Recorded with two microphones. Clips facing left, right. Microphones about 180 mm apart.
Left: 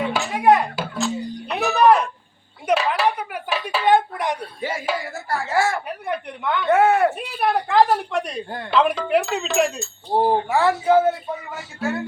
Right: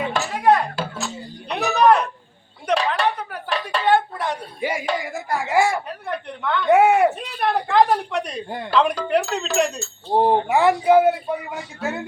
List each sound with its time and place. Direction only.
0.3 s a sound: 15° left (ahead or behind)
0.9 s music: centre (ahead or behind)
2.6 s a sound: 5° left (ahead or behind)
3.8 s a sound: 15° left (ahead or behind)
4.6 s speech: 10° right (ahead or behind)
6.1 s a woman's voice: 15° left (ahead or behind)
6.7 s speech: 15° right (ahead or behind)
7.2 s a woman's voice: 10° left (ahead or behind)
8.4 s speech: 15° right (ahead or behind)
8.7 s a woman's voice: centre (ahead or behind)
10.1 s speech: 20° right (ahead or behind)